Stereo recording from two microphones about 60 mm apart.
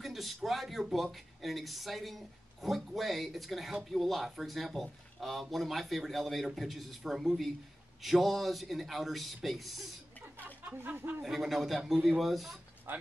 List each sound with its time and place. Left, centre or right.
0.0 s speech: centre
10.3 s a sound: right
11.1 s speech: centre
12.9 s speech: right